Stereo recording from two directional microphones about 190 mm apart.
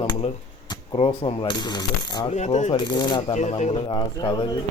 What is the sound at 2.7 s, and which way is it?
Speech, 20° left (ahead or behind).